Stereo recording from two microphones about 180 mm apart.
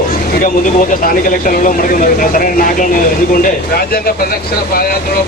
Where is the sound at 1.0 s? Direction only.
50° left (ahead or behind).